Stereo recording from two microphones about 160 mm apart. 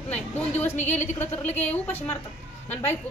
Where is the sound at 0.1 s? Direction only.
10° left (ahead or behind).